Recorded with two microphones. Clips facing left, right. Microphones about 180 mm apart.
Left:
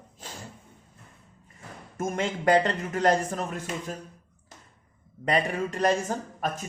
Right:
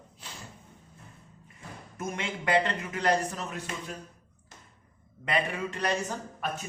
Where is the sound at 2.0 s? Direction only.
45° left (ahead or behind).